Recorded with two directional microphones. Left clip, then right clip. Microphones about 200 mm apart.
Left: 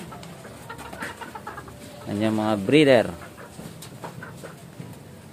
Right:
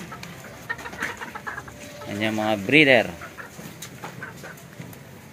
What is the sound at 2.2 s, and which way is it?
Speech, 25° left (ahead or behind).